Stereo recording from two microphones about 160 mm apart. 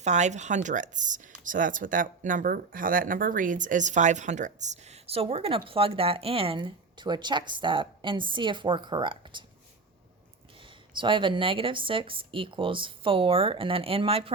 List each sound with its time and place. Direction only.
0.0 s speech: 45° right (ahead or behind); by 9.4 s 30° right (ahead or behind)
10.9 s speech: 30° right (ahead or behind)